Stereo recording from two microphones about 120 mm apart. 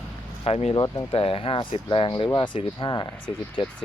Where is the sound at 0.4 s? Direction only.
55° left (ahead or behind).